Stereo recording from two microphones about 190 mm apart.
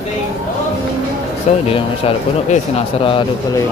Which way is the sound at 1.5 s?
35° left (ahead or behind).